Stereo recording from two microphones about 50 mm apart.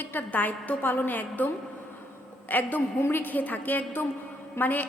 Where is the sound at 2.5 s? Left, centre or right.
Left.